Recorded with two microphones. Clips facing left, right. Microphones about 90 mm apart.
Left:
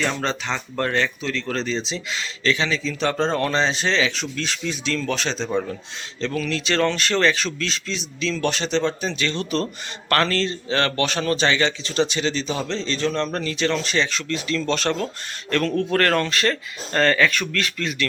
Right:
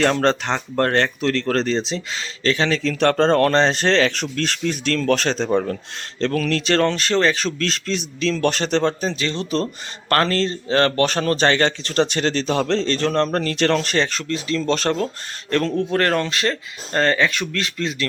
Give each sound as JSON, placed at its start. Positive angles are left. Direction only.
{"t": 0.0, "sound": "speech", "side_deg": -65}
{"t": 1.9, "sound": "speech", "side_deg": -40}
{"t": 2.6, "sound": "speech", "side_deg": -65}
{"t": 14.3, "sound": "speech", "side_deg": -30}